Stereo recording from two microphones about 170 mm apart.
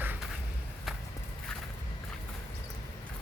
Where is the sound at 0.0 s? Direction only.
10° right (ahead or behind).